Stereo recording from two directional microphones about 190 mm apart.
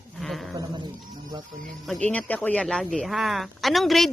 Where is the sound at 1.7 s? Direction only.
Centre (ahead or behind).